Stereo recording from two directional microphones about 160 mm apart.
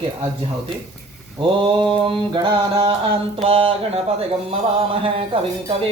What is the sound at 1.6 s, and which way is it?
Speech, 30° right (ahead or behind).